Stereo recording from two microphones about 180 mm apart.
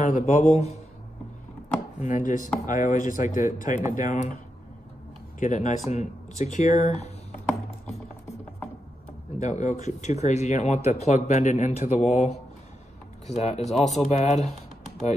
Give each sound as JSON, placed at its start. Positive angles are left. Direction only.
{"t": 0.0, "sound": "speech", "side_deg": 40}
{"t": 2.0, "sound": "speech", "side_deg": 45}
{"t": 5.4, "sound": "speech", "side_deg": 45}
{"t": 9.4, "sound": "speech", "side_deg": 45}